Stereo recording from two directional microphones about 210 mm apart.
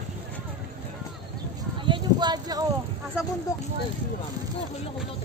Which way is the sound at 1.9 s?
20° right (ahead or behind).